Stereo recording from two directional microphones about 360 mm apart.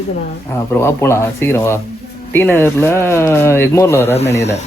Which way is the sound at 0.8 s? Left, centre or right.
Centre.